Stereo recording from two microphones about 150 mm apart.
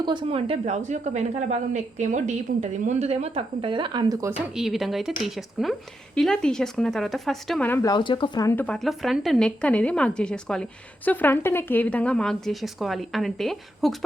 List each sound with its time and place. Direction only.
0.0 s a woman's voice: 30° right (ahead or behind)
4.3 s speech: 5° right (ahead or behind)
7.7 s speech: 20° left (ahead or behind)
7.9 s speech: 30° left (ahead or behind)
8.4 s speech: 10° left (ahead or behind)